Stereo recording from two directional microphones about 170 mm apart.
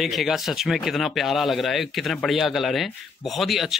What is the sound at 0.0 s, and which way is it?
Speech, centre (ahead or behind).